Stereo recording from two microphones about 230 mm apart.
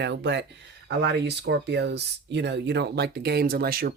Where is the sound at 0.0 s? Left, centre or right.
Right.